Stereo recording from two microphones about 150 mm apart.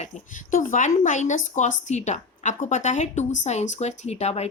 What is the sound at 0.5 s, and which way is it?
Speech, 60° left (ahead or behind).